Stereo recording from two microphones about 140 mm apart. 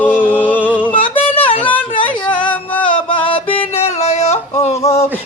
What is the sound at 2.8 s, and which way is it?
Music, 35° left (ahead or behind).